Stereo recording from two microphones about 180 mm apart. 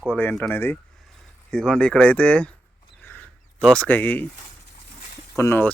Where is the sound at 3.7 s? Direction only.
10° left (ahead or behind).